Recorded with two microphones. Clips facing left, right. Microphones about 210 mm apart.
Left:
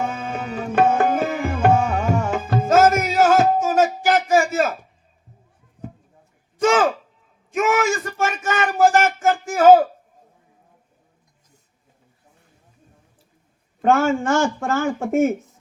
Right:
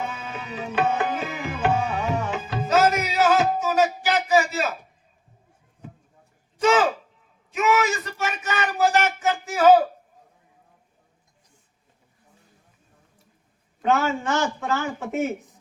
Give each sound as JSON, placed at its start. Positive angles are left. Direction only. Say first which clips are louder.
{"t": 0.0, "sound": "tabla", "louder": "left 6 dB", "side_deg": 50}
{"t": 6.6, "sound": "a sound", "louder": "left 2 dB", "side_deg": 50}
{"t": 13.8, "sound": "speech", "louder": "left 5 dB", "side_deg": 50}